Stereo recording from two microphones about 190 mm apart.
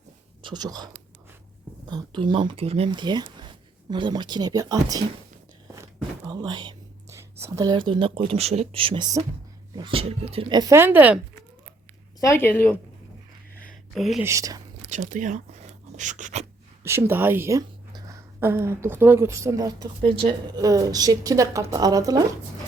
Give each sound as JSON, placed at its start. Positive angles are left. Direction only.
{"t": 0.4, "sound": "speech", "side_deg": -20}
{"t": 1.9, "sound": "speech", "side_deg": -25}
{"t": 5.7, "sound": "whispering", "side_deg": -20}
{"t": 9.7, "sound": "speech", "side_deg": -25}
{"t": 12.2, "sound": "speech", "side_deg": 15}
{"t": 13.9, "sound": "speech", "side_deg": 0}
{"t": 14.3, "sound": "speech", "side_deg": -15}
{"t": 14.8, "sound": "a sound", "side_deg": -40}
{"t": 16.8, "sound": "speech", "side_deg": -15}